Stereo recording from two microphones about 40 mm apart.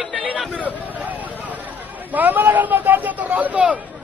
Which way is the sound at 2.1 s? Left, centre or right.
Right.